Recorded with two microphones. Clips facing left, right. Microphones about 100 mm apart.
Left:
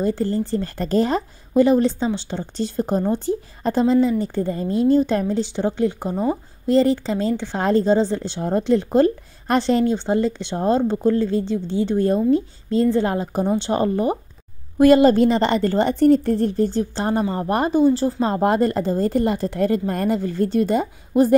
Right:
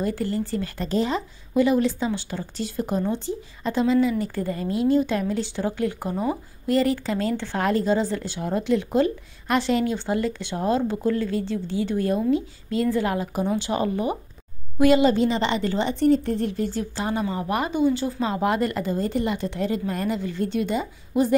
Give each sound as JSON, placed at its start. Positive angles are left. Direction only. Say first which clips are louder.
{"t": 0.0, "sound": "a woman's voice", "louder": "left 4 dB", "side_deg": 30}